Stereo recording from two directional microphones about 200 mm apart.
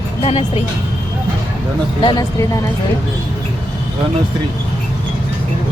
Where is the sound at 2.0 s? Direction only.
15° left (ahead or behind).